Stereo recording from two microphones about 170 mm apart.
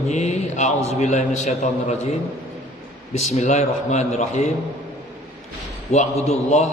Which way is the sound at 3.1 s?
40° left (ahead or behind).